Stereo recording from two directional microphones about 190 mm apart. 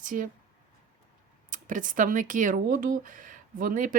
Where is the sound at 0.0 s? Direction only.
45° right (ahead or behind).